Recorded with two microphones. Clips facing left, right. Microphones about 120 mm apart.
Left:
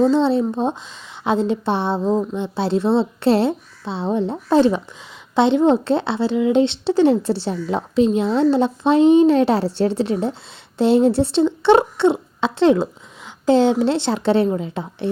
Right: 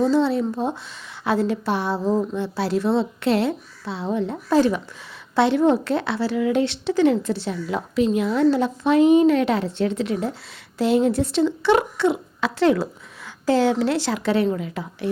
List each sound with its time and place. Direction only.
0.0 s speech: 25° left (ahead or behind)